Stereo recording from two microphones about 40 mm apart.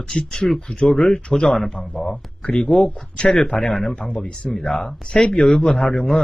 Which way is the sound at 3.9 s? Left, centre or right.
Left.